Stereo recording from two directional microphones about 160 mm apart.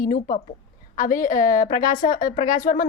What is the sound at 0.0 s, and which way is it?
A woman's voice, 60° left (ahead or behind).